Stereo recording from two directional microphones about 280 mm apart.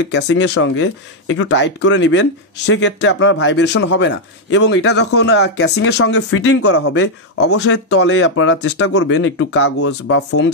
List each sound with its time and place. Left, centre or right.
0.0 s speech: left